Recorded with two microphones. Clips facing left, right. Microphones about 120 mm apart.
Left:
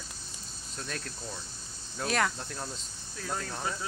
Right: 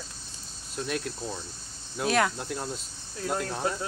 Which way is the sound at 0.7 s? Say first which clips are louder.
Right 8 dB; 5° right (ahead or behind).